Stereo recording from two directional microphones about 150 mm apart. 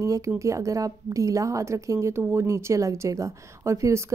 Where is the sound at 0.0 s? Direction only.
20° right (ahead or behind).